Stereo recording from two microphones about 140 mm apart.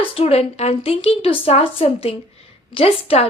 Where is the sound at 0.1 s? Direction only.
45° left (ahead or behind).